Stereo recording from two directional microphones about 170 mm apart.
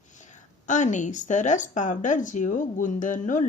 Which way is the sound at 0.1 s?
45° left (ahead or behind).